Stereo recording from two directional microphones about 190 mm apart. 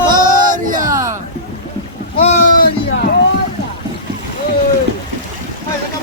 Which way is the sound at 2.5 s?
50° left (ahead or behind).